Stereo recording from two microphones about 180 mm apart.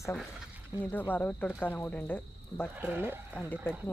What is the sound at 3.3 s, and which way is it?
Speech, 10° left (ahead or behind).